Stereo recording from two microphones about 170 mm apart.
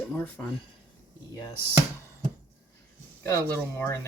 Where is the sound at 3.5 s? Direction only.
15° left (ahead or behind).